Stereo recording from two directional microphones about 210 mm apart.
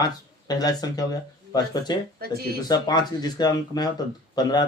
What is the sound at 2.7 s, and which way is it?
Speech, 20° left (ahead or behind).